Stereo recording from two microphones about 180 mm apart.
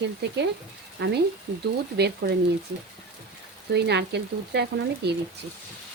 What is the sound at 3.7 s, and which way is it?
Speech, 70° right (ahead or behind).